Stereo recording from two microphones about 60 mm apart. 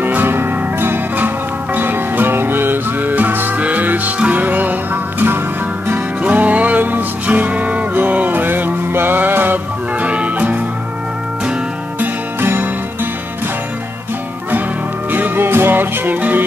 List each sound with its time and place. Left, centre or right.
0.0 s music: right
6.2 s music: right
10.0 s music: right
12.0 s music: right
15.0 s music: right